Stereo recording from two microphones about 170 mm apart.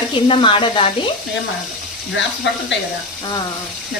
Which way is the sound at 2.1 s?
90° left.